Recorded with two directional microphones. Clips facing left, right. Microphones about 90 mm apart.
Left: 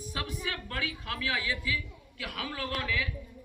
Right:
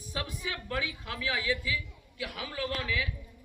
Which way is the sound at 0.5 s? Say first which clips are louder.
Right 1 dB; 15° right (ahead or behind).